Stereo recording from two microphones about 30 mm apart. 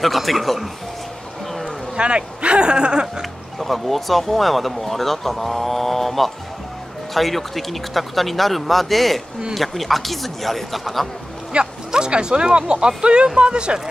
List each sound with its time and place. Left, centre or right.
0.0 s speech: centre
2.0 s speech: right
3.5 s speech: centre
11.5 s a sound: right
11.9 s speech: right